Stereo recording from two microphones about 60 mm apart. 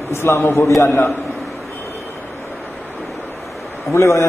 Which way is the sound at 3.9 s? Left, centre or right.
Left.